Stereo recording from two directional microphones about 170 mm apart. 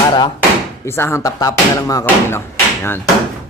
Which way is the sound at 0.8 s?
15° left (ahead or behind).